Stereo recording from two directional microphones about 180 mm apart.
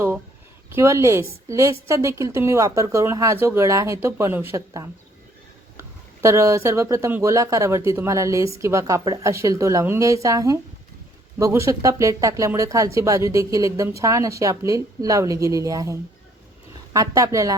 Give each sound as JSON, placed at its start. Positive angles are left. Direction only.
{"t": 0.7, "sound": "speech", "side_deg": -15}
{"t": 6.2, "sound": "speech", "side_deg": -15}